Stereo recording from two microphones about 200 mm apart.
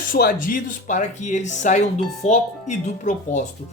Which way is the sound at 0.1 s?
45° left (ahead or behind).